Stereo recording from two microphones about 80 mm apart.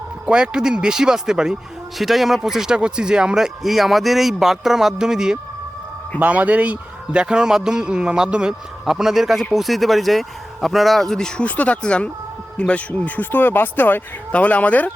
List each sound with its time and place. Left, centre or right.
0.3 s a man's voice: centre
6.1 s a man's voice: centre